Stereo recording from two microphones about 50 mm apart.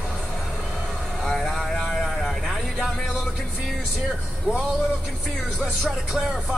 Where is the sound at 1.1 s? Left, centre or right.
Centre.